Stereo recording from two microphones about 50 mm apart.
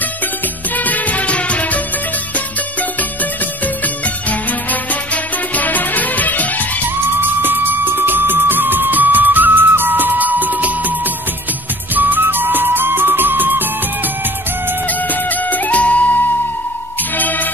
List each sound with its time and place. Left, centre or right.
0.7 s music: left
3.0 s music: left
7.2 s music: right
14.9 s music: left